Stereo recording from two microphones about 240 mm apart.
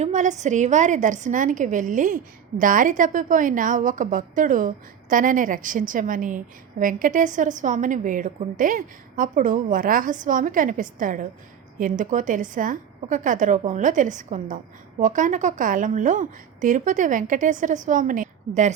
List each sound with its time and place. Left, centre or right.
0.0 s a woman's voice: right